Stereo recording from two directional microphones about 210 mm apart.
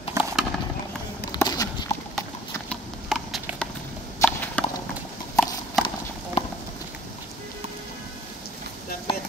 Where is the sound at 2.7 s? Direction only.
Centre (ahead or behind).